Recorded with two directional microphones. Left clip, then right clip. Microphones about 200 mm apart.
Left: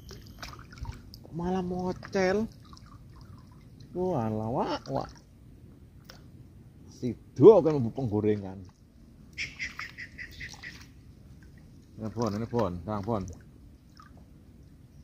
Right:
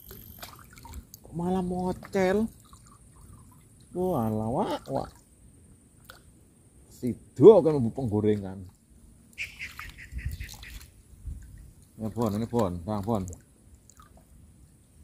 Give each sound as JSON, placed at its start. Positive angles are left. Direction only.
{"t": 0.4, "sound": "pour", "side_deg": -10}
{"t": 3.9, "sound": "a man's voice", "side_deg": -10}
{"t": 7.0, "sound": "a man's voice", "side_deg": -10}
{"t": 9.3, "sound": "duck", "side_deg": 55}
{"t": 12.0, "sound": "a man's voice", "side_deg": -10}